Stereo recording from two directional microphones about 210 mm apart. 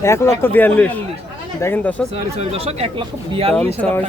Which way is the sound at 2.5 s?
30° right (ahead or behind).